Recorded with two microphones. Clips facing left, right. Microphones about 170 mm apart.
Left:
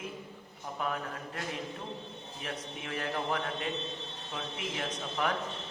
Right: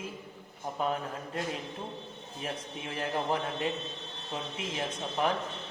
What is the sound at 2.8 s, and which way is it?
Speech, 30° right (ahead or behind).